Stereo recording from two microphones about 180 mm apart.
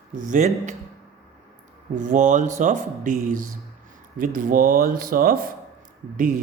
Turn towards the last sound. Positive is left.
turn(degrees=-50)  # may be behind; listen again after turning